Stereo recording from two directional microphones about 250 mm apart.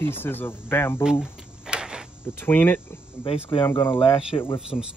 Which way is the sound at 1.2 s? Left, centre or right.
Centre.